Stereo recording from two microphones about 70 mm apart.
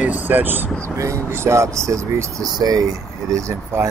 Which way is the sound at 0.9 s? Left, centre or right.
Right.